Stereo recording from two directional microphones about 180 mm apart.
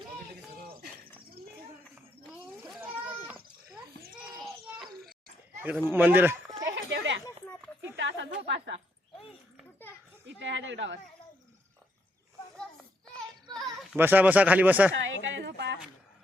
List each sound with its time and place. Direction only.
2.8 s goat: 10° right (ahead or behind)
4.4 s a sound: centre (ahead or behind)
5.6 s speech: 10° right (ahead or behind)
6.7 s a sound: 90° right
7.9 s speech: 80° right
10.2 s speech: 85° right
13.1 s children playing: centre (ahead or behind)
14.0 s speech: 10° right (ahead or behind)
15.0 s a sound: 80° right